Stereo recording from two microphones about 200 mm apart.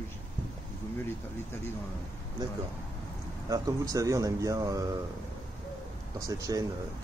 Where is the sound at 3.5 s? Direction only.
15° right (ahead or behind).